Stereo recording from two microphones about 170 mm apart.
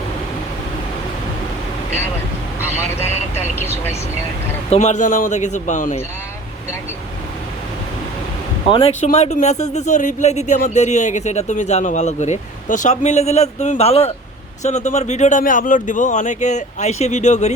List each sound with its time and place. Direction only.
2.6 s speech: 10° left (ahead or behind)
4.7 s speech: 40° left (ahead or behind)
8.7 s speech: 35° left (ahead or behind)